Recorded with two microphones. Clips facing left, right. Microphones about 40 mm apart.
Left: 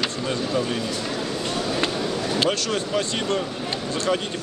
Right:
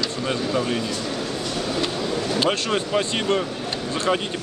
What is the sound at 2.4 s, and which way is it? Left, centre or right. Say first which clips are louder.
Speech: right 1 dB; right.